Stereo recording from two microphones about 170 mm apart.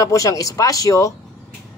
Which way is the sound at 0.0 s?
20° left (ahead or behind).